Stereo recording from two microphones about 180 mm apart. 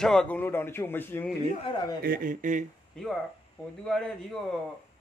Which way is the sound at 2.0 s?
50° right (ahead or behind).